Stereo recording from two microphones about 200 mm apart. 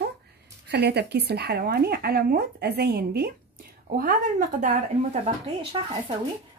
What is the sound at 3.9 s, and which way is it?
Speech, 40° right (ahead or behind).